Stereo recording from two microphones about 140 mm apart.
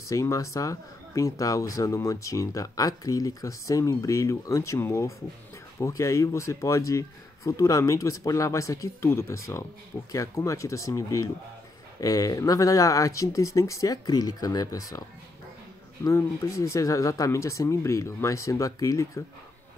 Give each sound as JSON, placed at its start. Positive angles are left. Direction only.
{"t": 0.1, "sound": "speech", "side_deg": 25}